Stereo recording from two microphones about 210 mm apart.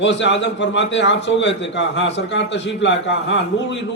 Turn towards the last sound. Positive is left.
turn(degrees=60)  # may be behind; listen again after turning